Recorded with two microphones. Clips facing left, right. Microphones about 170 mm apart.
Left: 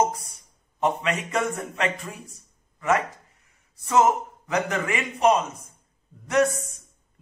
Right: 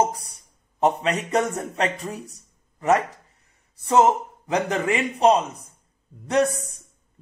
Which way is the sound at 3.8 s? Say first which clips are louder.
Right 2 dB; 30° right (ahead or behind).